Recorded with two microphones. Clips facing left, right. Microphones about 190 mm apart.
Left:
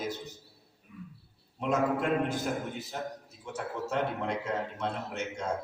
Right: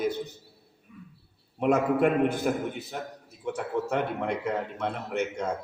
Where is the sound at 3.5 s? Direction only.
60° right (ahead or behind).